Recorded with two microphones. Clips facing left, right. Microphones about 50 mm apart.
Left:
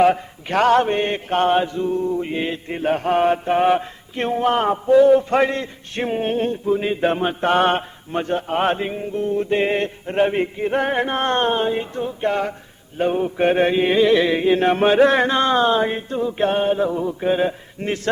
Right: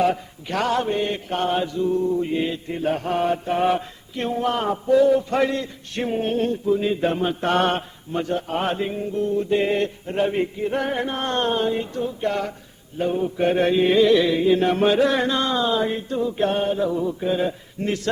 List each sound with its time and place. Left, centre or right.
0.0 s male singing: left
13.0 s male singing: left